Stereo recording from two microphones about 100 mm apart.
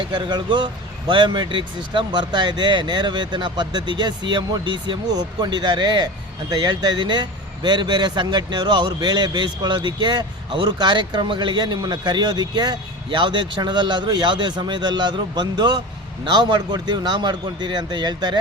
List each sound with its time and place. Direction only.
0.1 s speech: 45° right (ahead or behind)